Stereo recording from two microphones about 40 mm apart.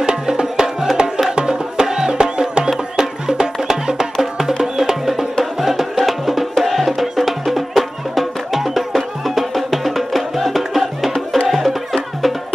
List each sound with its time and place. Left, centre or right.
0.0 s music: right; by 12.4 s centre